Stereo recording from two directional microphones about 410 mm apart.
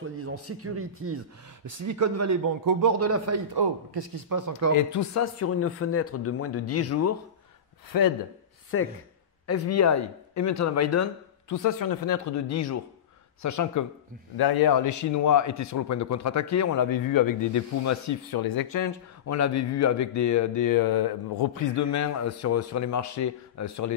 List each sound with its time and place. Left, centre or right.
0.0 s a man's voice: right
3.0 s a man's voice: right
3.5 s speech: right
4.7 s speech: left
8.7 s a man's voice: left
14.3 s a man's voice: left
21.7 s speech: left